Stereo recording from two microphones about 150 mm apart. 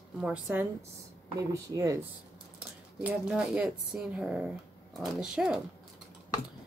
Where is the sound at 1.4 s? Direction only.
20° right (ahead or behind).